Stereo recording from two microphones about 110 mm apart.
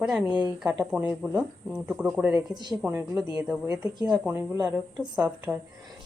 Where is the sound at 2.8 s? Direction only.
20° right (ahead or behind).